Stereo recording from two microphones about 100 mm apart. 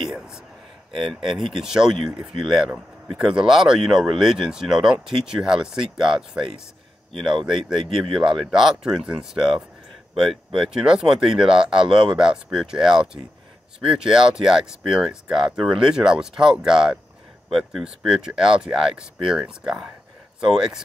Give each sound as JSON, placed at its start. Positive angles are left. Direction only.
{"t": 0.9, "sound": "speech", "side_deg": -5}
{"t": 7.9, "sound": "speech", "side_deg": -5}